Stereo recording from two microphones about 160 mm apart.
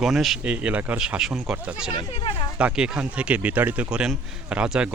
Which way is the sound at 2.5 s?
5° right (ahead or behind).